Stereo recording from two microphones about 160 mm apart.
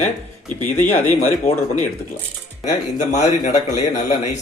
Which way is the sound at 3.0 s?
50° left (ahead or behind).